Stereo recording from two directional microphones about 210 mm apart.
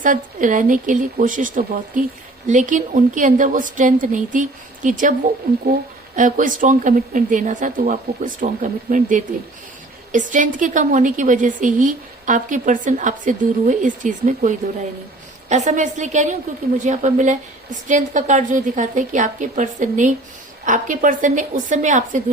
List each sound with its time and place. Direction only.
0.0 s a woman's voice: 40° right (ahead or behind)
6.1 s a woman's voice: 40° right (ahead or behind)